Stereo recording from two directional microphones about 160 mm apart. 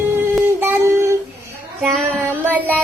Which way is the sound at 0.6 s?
15° right (ahead or behind).